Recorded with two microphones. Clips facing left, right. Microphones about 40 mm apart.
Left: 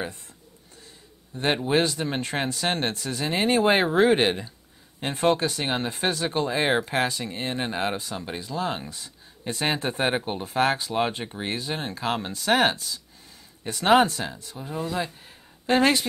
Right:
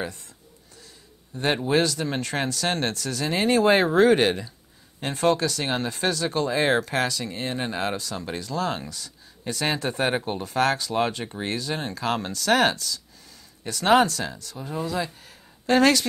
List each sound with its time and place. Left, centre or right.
1.3 s a man's voice: left